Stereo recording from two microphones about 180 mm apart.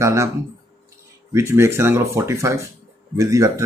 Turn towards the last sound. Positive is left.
turn(degrees=-20)  # may be behind; listen again after turning